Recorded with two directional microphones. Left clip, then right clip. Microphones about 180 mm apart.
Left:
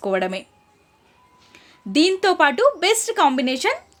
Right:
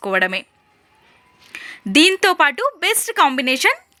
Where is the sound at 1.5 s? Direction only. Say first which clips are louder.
Right 7 dB; 10° right (ahead or behind).